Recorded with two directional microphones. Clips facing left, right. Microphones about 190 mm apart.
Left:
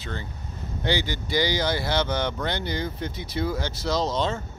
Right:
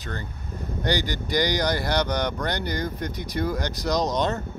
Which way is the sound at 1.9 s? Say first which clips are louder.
Right 1 dB; 15° right (ahead or behind).